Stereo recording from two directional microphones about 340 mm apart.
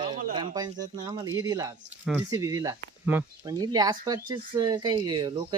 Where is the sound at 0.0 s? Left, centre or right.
Centre.